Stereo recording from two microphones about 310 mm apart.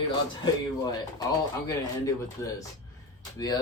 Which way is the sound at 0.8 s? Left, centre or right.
Centre.